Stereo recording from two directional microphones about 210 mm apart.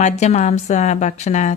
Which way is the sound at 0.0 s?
30° left (ahead or behind).